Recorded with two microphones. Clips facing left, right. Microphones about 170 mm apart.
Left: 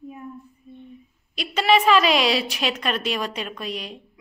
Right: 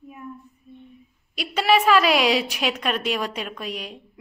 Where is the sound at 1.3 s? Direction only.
10° right (ahead or behind).